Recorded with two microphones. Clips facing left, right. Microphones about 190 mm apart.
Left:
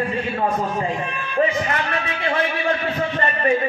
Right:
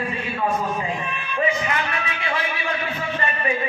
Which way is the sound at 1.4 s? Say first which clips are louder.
Left 3 dB; 40° left (ahead or behind).